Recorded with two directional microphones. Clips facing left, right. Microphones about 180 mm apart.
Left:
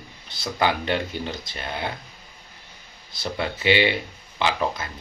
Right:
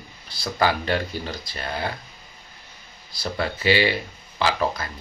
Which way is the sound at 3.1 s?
20° left (ahead or behind).